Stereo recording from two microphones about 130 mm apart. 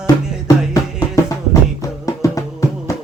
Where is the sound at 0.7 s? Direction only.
25° left (ahead or behind).